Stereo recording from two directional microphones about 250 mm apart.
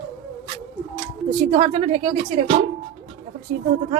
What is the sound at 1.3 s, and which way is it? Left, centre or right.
Speech, right.